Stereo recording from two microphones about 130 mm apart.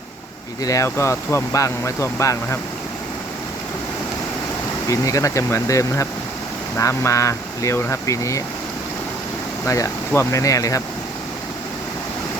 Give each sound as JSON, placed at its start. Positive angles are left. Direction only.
{"t": 0.6, "sound": "speech", "side_deg": 25}
{"t": 4.9, "sound": "speech", "side_deg": 25}
{"t": 9.6, "sound": "speech", "side_deg": 25}